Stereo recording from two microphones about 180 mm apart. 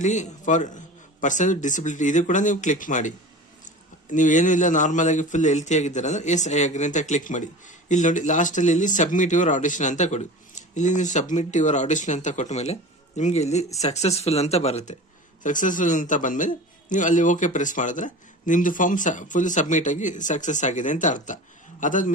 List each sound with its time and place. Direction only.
0.0 s a man's voice: 40° left (ahead or behind)
4.1 s a man's voice: 45° left (ahead or behind)